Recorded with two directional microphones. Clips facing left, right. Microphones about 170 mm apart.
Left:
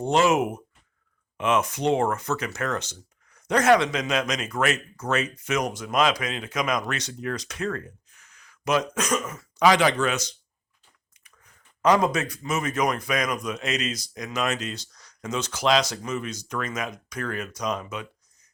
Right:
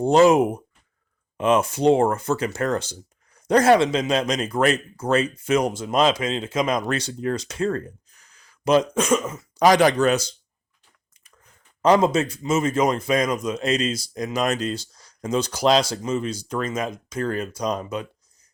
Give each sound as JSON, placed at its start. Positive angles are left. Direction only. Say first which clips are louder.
{"t": 0.0, "sound": "speech", "louder": "right 6 dB", "side_deg": -35}
{"t": 9.6, "sound": "speech", "louder": "right 4 dB", "side_deg": -40}
{"t": 11.8, "sound": "a man's voice", "louder": "right 4 dB", "side_deg": -30}